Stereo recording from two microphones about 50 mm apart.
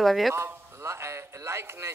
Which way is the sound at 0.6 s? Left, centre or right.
Right.